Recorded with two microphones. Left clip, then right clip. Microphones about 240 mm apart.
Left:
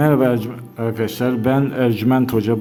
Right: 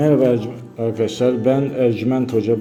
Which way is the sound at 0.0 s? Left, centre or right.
Left.